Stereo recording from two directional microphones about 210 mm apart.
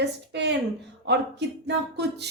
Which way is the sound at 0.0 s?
55° right (ahead or behind).